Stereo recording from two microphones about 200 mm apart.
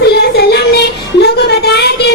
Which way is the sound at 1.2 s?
55° left (ahead or behind).